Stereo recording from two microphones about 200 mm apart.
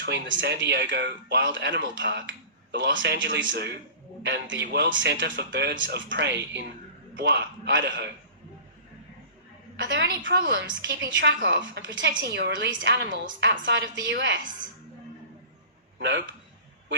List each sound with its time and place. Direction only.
0.0 s a woman's voice: 65° right (ahead or behind)
9.7 s a woman's voice: 65° right (ahead or behind)
16.0 s speech: 60° right (ahead or behind)